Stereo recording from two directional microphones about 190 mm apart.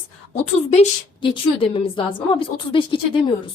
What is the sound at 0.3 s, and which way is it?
A woman's voice, 35° left (ahead or behind).